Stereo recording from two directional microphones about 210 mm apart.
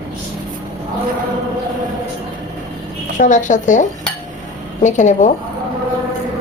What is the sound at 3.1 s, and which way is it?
Speech, 35° left (ahead or behind).